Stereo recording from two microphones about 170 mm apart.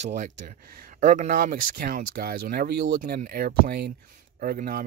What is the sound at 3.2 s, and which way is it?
Speech, 60° right (ahead or behind).